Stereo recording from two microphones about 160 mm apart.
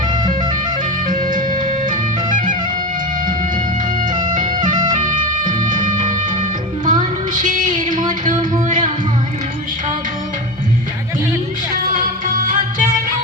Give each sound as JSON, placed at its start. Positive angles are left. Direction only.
{"t": 1.0, "sound": "music", "side_deg": -60}
{"t": 4.1, "sound": "music", "side_deg": -30}
{"t": 6.8, "sound": "music", "side_deg": -55}
{"t": 12.4, "sound": "music", "side_deg": -55}